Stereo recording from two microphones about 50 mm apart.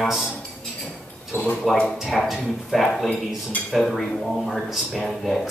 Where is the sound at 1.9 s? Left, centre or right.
Centre.